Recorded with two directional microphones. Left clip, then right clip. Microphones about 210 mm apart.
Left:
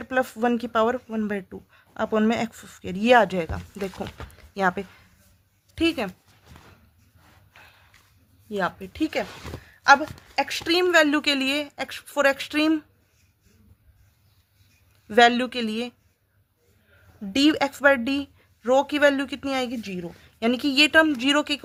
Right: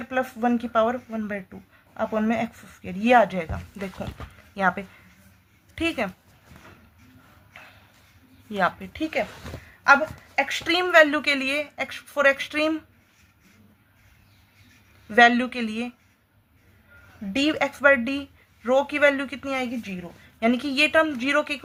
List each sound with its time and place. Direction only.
0.0 s speech: 45° left (ahead or behind)
8.4 s speech: 35° left (ahead or behind)
10.4 s speech: 40° left (ahead or behind)
15.1 s speech: 40° left (ahead or behind)
17.3 s speech: 45° left (ahead or behind)